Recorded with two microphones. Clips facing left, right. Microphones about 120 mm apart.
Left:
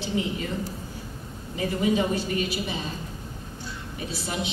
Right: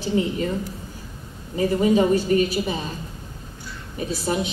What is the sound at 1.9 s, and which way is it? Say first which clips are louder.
Speech: right 7 dB; 45° right (ahead or behind).